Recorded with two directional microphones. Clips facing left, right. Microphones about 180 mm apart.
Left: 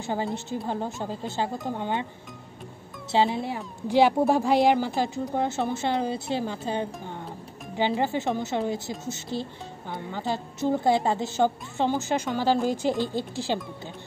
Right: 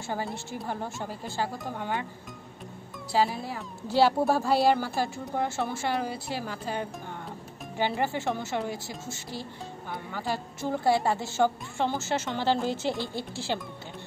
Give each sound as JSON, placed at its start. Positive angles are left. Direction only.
{"t": 0.0, "sound": "speech", "side_deg": 20}
{"t": 3.1, "sound": "speech", "side_deg": 25}